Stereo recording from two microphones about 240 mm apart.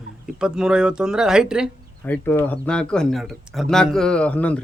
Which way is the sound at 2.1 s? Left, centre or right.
Centre.